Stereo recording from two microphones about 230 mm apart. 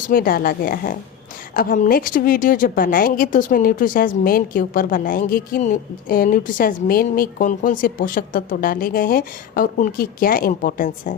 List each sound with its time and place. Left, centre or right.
0.1 s a woman's voice: left